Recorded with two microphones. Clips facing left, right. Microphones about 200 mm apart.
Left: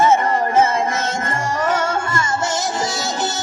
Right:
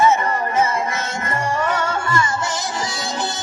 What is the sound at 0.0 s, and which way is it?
Music, 50° left (ahead or behind).